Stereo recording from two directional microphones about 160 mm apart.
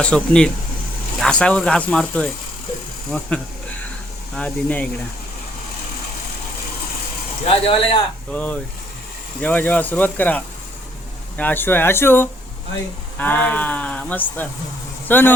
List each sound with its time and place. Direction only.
0.0 s speech: 5° left (ahead or behind)
7.4 s speech: 40° left (ahead or behind)
8.3 s speech: 10° left (ahead or behind)